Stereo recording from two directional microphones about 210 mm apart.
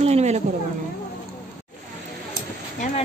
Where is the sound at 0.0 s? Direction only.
30° right (ahead or behind).